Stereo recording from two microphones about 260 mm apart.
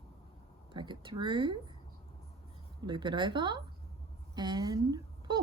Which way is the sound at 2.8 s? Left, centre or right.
Centre.